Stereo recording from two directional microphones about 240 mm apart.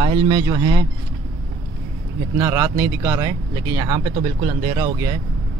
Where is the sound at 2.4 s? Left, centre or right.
Centre.